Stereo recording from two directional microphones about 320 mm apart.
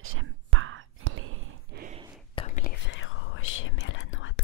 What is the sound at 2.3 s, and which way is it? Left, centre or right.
Whispering, left.